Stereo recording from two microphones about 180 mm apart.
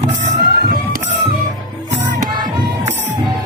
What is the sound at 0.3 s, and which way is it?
Music, 50° right (ahead or behind).